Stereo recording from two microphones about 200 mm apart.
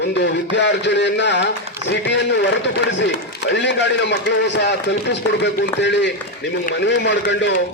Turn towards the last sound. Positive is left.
turn(degrees=60)  # may be behind; listen again after turning